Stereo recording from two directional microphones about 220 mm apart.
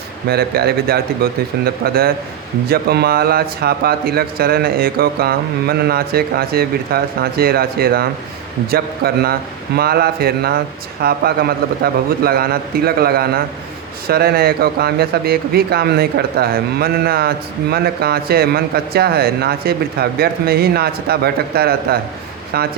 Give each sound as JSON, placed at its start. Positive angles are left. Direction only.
{"t": 0.3, "sound": "speech", "side_deg": -45}